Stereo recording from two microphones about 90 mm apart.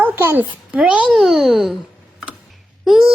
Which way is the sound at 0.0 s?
25° right (ahead or behind).